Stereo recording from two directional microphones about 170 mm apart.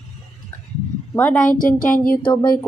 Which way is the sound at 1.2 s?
10° left (ahead or behind).